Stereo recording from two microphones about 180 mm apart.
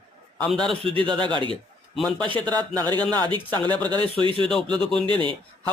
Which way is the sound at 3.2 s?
25° right (ahead or behind).